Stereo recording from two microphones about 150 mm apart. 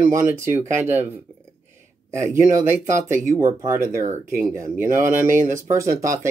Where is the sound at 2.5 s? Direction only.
60° right (ahead or behind).